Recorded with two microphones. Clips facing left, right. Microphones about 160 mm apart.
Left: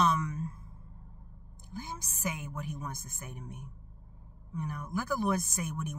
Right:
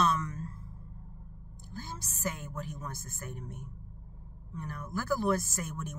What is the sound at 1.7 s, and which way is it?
Speech, 15° left (ahead or behind).